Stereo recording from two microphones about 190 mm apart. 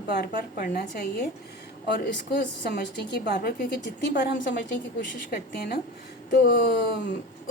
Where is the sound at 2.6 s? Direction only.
55° left (ahead or behind).